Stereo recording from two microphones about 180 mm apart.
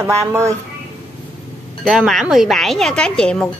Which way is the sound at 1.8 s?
Centre (ahead or behind).